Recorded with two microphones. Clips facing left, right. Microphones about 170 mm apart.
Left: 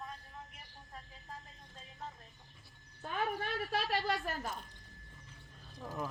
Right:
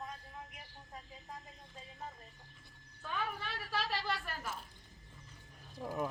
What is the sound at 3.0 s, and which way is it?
Speech, 40° left (ahead or behind).